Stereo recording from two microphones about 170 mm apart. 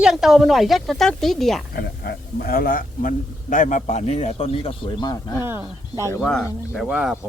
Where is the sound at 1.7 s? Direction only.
70° left (ahead or behind); by 5.4 s 25° left (ahead or behind).